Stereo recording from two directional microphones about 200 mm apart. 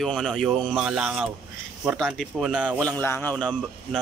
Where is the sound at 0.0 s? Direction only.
Centre (ahead or behind).